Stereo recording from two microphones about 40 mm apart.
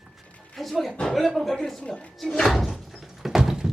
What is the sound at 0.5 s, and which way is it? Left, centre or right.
A woman's voice, centre.